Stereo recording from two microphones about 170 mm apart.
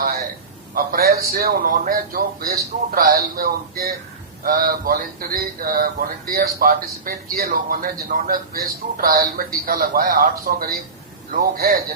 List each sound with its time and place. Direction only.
0.7 s speech: 60° right (ahead or behind)